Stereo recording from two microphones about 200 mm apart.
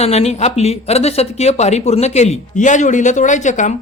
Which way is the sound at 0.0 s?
30° left (ahead or behind).